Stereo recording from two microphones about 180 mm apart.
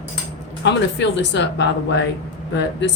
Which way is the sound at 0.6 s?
80° left.